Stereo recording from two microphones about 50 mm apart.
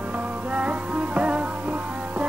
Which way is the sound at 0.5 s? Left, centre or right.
Right.